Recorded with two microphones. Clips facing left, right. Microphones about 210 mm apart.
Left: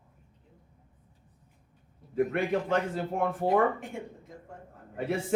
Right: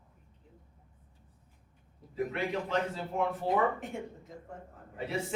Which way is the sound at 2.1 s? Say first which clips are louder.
Left 6 dB; 50° left (ahead or behind).